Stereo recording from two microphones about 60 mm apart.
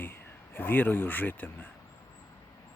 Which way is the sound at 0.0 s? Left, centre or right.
Left.